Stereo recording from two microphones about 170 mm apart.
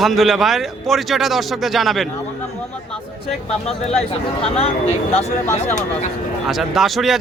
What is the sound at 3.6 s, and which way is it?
Speech, 40° left (ahead or behind).